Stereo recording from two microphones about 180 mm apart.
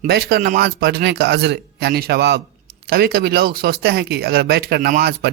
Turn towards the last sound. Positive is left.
turn(degrees=-60)  # may be behind; listen again after turning